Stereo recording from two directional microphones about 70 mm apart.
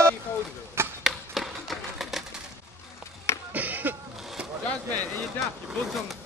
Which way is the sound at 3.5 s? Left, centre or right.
Right.